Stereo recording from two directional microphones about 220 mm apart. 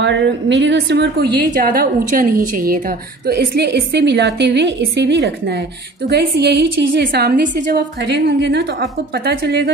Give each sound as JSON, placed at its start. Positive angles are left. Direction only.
{"t": 0.0, "sound": "a woman's voice", "side_deg": -55}